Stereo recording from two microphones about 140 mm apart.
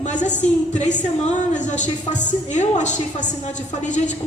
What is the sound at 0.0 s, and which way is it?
A woman's voice, 60° left (ahead or behind).